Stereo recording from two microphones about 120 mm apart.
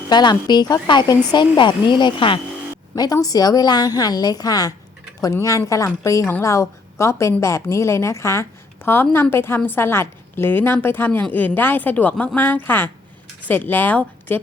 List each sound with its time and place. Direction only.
0.1 s speech: 35° left (ahead or behind)
2.9 s a woman's voice: 30° left (ahead or behind); by 14.3 s 15° left (ahead or behind)